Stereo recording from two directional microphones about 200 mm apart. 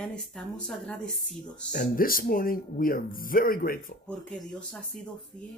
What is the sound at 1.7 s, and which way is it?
Speech, 45° left (ahead or behind).